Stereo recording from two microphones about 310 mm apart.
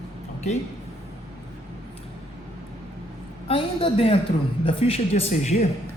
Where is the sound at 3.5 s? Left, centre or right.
Centre.